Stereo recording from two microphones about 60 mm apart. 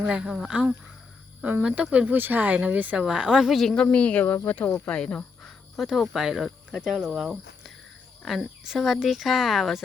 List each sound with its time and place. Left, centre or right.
0.1 s speech: centre
2.1 s speech: right
3.0 s speech: centre
3.5 s speech: centre
3.9 s speech: left
4.9 s speech: centre
5.7 s speech: centre